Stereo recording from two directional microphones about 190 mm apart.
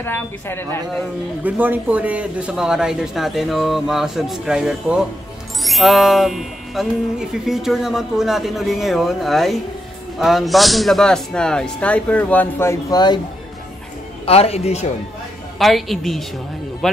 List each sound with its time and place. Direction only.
0.0 s speech: 10° left (ahead or behind)
1.4 s music: 10° right (ahead or behind); by 13.2 s 20° left (ahead or behind)
14.2 s a man's voice: 30° left (ahead or behind)
15.6 s music: centre (ahead or behind)
16.8 s speech: centre (ahead or behind)